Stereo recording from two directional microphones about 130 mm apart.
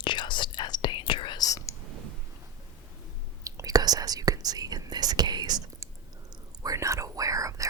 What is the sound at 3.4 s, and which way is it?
Whispering, 25° right (ahead or behind).